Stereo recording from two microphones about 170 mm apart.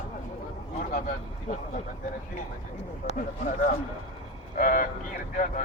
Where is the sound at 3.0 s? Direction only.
50° left (ahead or behind).